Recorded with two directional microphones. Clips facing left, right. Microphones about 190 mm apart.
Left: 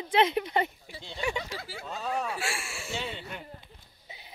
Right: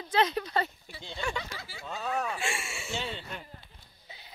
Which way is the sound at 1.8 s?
Centre (ahead or behind).